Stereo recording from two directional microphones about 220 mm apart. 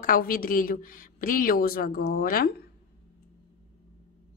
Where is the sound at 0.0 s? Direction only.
40° left (ahead or behind).